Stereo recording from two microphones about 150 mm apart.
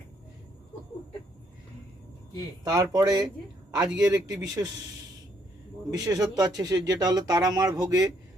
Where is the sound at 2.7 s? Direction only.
25° right (ahead or behind).